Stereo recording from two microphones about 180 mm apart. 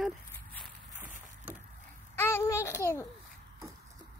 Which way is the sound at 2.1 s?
15° left (ahead or behind).